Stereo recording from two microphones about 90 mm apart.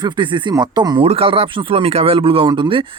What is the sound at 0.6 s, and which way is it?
Speech, 50° right (ahead or behind).